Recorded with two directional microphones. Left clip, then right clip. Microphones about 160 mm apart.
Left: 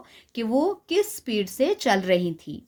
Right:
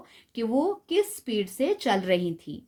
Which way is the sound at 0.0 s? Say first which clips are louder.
Left 2 dB; 20° left (ahead or behind).